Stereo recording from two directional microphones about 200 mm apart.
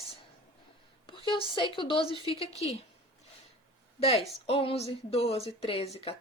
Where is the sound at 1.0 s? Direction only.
25° left (ahead or behind).